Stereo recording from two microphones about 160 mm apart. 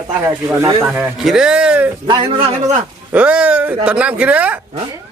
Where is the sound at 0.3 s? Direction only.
15° right (ahead or behind).